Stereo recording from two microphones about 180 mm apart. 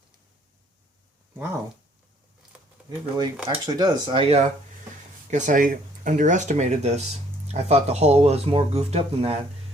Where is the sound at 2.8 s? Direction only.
25° right (ahead or behind).